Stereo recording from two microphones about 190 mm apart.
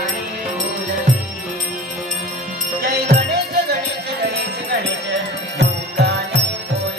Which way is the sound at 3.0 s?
60° right (ahead or behind).